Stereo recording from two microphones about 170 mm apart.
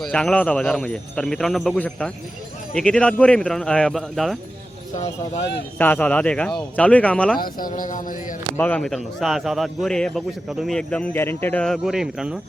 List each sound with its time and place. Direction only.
0.0 s a man's voice: 5° left (ahead or behind)
5.8 s speech: 10° left (ahead or behind)
7.3 s speech: 55° left (ahead or behind)
8.5 s a man's voice: 10° left (ahead or behind)